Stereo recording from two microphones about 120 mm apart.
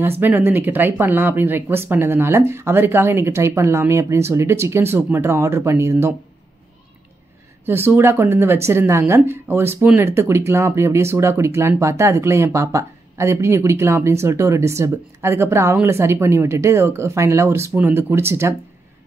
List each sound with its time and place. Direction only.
0.2 s speech: 15° right (ahead or behind)
7.6 s speech: 20° right (ahead or behind)